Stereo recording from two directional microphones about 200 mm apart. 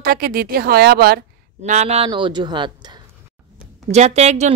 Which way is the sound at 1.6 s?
35° right (ahead or behind).